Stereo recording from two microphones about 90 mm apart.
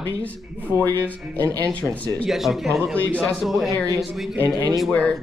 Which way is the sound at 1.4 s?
40° right (ahead or behind).